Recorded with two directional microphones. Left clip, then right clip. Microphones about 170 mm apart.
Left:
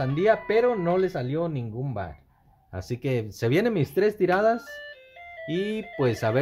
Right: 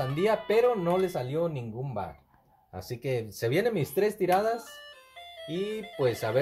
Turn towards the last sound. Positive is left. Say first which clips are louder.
# left 2 dB
turn(degrees=45)  # may be behind; listen again after turning